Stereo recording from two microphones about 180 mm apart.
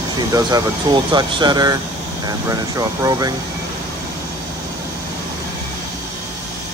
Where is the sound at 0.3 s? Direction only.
20° right (ahead or behind).